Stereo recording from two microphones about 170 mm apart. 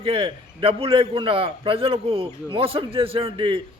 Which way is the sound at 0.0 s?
30° right (ahead or behind).